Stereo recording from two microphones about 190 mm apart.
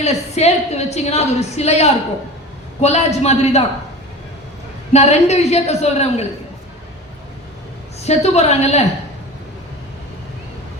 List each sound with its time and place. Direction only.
0.0 s a woman's voice: 35° left (ahead or behind)
4.9 s a woman's voice: 35° left (ahead or behind)
8.0 s a woman's voice: 35° left (ahead or behind)